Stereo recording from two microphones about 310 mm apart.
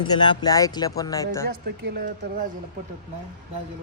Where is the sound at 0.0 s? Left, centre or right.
Centre.